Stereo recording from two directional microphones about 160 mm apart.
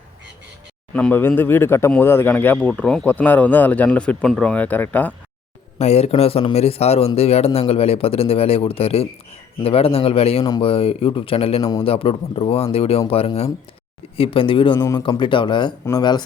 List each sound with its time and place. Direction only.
0.9 s speech: 10° left (ahead or behind)
5.8 s speech: 40° left (ahead or behind)